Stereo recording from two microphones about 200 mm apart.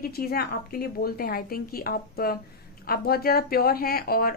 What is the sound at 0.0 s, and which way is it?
A woman's voice, 50° left (ahead or behind).